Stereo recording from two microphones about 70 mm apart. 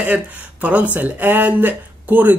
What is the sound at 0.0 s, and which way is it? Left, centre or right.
Speech, right.